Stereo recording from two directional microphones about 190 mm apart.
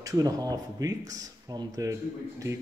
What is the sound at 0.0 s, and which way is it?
Speech, 20° right (ahead or behind).